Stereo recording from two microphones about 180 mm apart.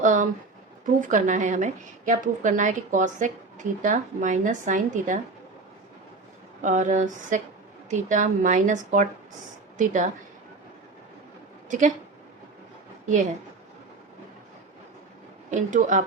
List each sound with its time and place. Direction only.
0.0 s a sound: 45° right (ahead or behind)
1.0 s a woman's voice: 45° right (ahead or behind)
6.6 s a woman's voice: 45° right (ahead or behind)
11.7 s a woman's voice: 45° right (ahead or behind)
15.4 s a woman's voice: 45° right (ahead or behind)